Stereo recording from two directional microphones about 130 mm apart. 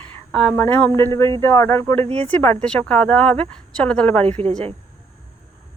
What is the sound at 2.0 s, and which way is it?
Speech, 55° right (ahead or behind).